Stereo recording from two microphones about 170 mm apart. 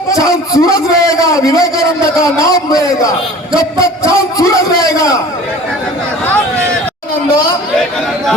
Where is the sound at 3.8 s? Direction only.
20° left (ahead or behind).